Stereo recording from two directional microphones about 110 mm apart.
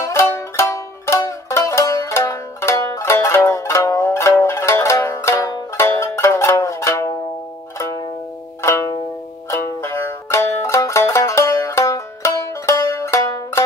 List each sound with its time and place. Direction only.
0.0 s music: 25° left (ahead or behind)
8.6 s music: 30° left (ahead or behind)